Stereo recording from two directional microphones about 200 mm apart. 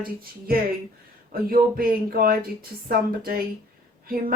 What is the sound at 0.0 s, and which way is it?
Speech, 45° right (ahead or behind).